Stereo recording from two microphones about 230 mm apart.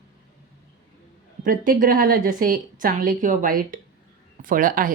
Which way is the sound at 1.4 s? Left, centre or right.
Right.